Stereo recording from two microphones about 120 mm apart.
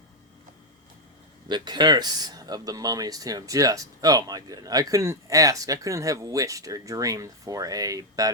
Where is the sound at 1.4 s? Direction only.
40° right (ahead or behind).